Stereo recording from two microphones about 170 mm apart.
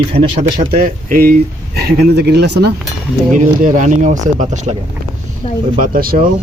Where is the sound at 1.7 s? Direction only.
70° right (ahead or behind).